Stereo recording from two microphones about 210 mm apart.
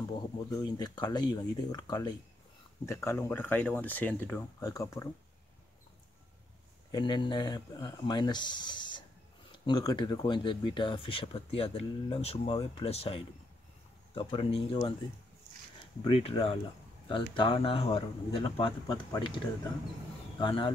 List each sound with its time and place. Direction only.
0.1 s speech: 20° left (ahead or behind)
6.9 s speech: 20° left (ahead or behind)
16.0 s speech: 25° left (ahead or behind)